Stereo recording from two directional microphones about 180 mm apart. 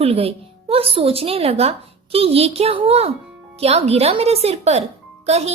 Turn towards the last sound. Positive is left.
turn(degrees=-35)  # may be behind; listen again after turning